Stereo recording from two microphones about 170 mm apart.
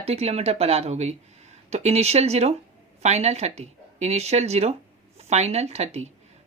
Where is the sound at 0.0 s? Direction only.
35° right (ahead or behind).